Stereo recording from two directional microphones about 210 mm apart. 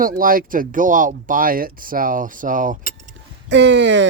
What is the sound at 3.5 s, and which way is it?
Speech, 55° right (ahead or behind).